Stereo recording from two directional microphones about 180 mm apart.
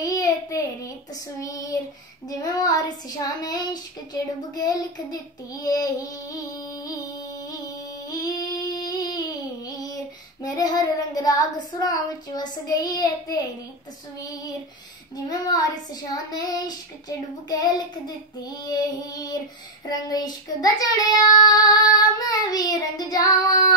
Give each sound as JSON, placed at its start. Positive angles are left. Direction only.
{"t": 0.0, "sound": "child singing", "side_deg": 20}
{"t": 8.1, "sound": "a sound", "side_deg": 20}
{"t": 10.4, "sound": "child singing", "side_deg": 20}
{"t": 11.8, "sound": "child singing", "side_deg": 20}
{"t": 15.2, "sound": "child singing", "side_deg": 20}